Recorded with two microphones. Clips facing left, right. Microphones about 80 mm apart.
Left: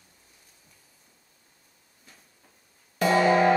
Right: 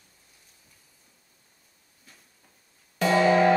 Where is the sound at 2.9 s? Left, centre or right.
Centre.